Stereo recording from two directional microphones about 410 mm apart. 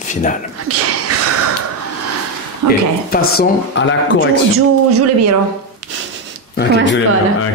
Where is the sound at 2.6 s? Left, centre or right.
Right.